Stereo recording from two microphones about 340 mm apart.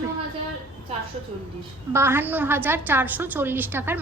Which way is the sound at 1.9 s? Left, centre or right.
Centre.